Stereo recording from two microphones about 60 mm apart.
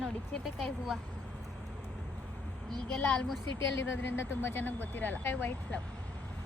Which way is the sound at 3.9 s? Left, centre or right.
Left.